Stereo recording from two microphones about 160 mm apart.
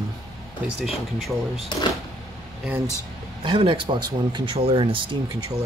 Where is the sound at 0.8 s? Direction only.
Centre (ahead or behind).